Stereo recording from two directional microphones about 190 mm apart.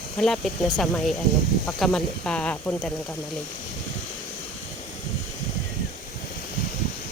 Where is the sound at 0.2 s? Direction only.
Centre (ahead or behind).